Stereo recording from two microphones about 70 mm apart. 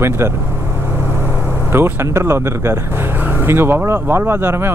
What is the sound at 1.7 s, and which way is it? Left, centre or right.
Speech, right.